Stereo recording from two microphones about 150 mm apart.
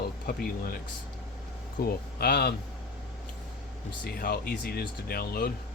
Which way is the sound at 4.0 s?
85° left.